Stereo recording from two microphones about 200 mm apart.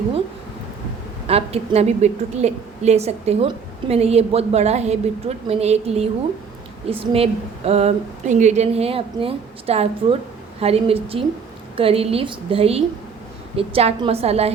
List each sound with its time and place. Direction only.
1.3 s a woman's voice: 30° right (ahead or behind)